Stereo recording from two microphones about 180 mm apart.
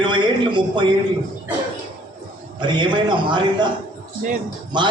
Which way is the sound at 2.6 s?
25° right (ahead or behind).